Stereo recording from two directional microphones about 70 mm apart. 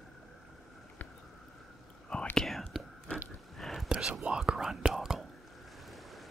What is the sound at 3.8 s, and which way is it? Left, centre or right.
Whispering, centre.